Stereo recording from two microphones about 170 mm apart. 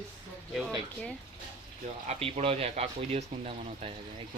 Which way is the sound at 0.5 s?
Centre (ahead or behind).